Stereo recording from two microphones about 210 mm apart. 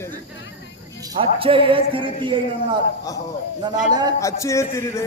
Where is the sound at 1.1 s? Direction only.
25° right (ahead or behind).